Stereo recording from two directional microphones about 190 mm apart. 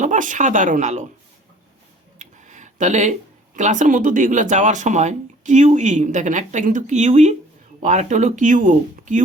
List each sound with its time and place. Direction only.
0.0 s speech: 40° right (ahead or behind)
2.1 s speech: 40° right (ahead or behind)